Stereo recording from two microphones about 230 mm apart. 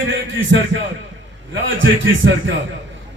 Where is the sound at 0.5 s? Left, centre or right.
Right.